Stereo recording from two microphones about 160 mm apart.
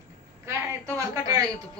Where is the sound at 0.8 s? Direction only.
20° right (ahead or behind).